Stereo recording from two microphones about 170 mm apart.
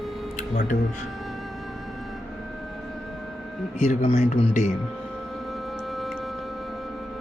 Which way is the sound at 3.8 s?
45° left (ahead or behind).